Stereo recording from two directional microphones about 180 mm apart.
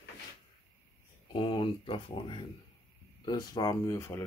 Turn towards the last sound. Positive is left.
turn(degrees=15)  # may be behind; listen again after turning